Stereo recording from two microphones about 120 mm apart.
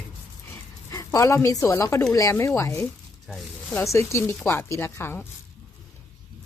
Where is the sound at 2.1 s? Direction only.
25° left (ahead or behind).